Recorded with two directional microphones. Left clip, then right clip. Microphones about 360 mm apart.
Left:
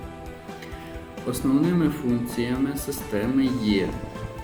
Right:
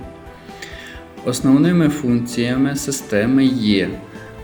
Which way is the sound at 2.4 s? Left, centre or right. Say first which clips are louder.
Right 7 dB; right.